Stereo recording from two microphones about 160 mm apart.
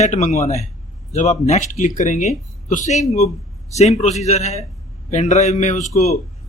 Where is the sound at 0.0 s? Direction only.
45° left (ahead or behind).